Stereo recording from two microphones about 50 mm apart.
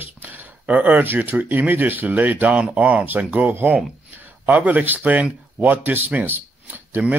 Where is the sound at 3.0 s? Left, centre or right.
Right.